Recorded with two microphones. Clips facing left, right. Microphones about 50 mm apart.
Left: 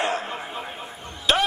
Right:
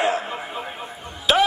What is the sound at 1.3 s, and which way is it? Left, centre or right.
Music, centre.